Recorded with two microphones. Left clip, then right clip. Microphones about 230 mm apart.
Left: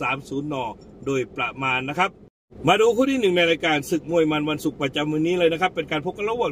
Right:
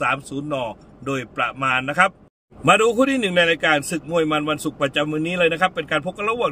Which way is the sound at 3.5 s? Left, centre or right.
Right.